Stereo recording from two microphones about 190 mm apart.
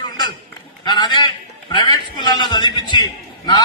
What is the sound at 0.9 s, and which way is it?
A man's voice, 20° left (ahead or behind).